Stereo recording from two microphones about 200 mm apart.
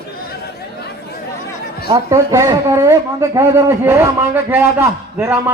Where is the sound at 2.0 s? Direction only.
15° right (ahead or behind).